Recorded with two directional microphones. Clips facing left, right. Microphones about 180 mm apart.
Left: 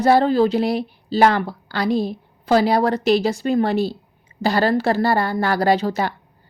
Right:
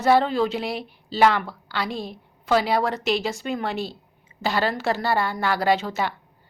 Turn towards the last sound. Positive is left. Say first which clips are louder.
# left 4 dB
turn(degrees=40)  # may be behind; listen again after turning